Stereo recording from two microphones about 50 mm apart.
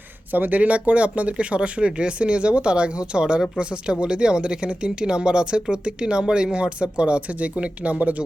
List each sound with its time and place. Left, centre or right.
0.3 s speech: right